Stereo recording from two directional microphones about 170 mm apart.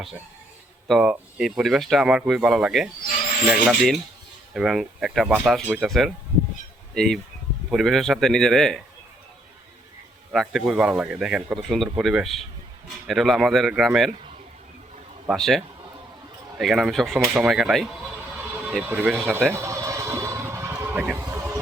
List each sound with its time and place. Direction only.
0.9 s speech: 5° right (ahead or behind)
10.3 s speech: centre (ahead or behind)
15.3 s speech: centre (ahead or behind)
19.5 s a sound: 15° right (ahead or behind)